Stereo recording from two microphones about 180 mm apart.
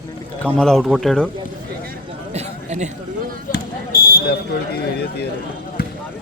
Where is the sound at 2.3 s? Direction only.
40° right (ahead or behind).